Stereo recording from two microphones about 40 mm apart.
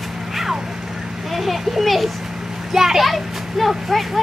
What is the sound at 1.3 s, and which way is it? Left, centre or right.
A child's voice, centre.